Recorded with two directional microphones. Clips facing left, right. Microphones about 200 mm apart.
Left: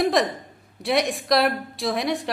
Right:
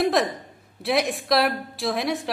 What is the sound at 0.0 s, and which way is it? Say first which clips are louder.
A woman's voice: left 1 dB; centre (ahead or behind).